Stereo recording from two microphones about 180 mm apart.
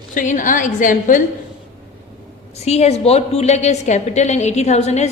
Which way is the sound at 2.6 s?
35° left (ahead or behind).